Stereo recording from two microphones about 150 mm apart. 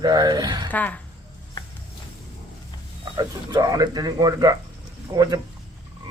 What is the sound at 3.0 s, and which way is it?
A man's voice, 25° right (ahead or behind).